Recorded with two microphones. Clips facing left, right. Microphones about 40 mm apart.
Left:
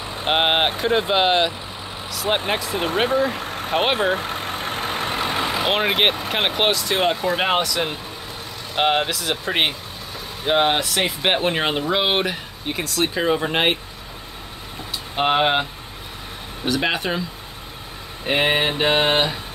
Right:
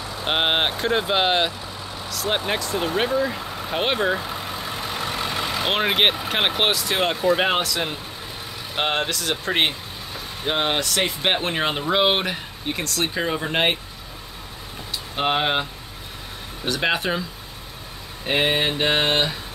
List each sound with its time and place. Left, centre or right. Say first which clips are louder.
0.0 s vehicle: left 2 dB; left
0.3 s speech: left 3 dB; centre
2.7 s speech: right 1 dB; left
3.1 s speech: left 2 dB; left
3.8 s speech: left 1 dB; left
4.1 s vehicle: left 2 dB; left
5.2 s vehicle: left 4 dB; left
5.6 s speech: even; centre
15.1 s speech: left 3 dB; centre
16.6 s speech: left 1 dB; centre
18.2 s speech: left 2 dB; centre